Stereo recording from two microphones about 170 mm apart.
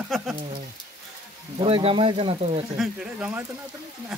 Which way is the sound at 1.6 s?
30° right (ahead or behind).